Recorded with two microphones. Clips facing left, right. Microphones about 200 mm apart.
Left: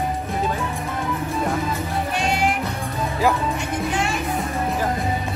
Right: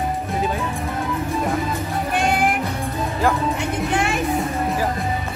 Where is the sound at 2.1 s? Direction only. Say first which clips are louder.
Right 3 dB; 55° right (ahead or behind).